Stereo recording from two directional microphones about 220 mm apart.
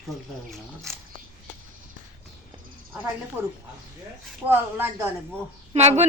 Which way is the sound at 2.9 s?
5° right (ahead or behind).